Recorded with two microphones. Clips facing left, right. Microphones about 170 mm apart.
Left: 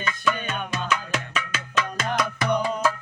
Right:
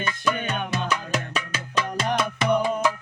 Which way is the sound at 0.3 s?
15° right (ahead or behind).